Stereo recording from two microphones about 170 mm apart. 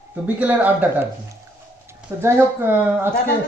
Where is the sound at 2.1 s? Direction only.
15° right (ahead or behind).